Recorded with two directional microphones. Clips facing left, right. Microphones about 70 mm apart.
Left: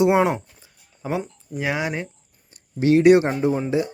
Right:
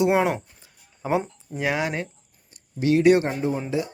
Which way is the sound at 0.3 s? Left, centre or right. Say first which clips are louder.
Left 1 dB; centre.